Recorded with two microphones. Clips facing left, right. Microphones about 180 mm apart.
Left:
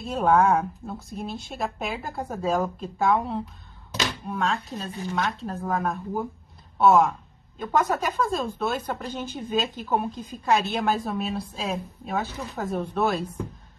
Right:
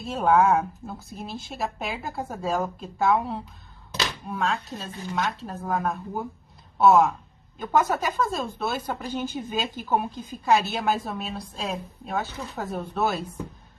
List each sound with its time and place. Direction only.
0.0 s a woman's voice: centre (ahead or behind)